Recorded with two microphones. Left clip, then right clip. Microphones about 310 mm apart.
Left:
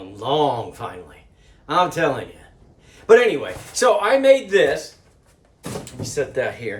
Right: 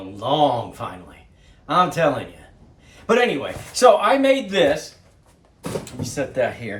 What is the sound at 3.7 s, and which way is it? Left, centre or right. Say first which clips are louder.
Speech: right 2 dB; centre.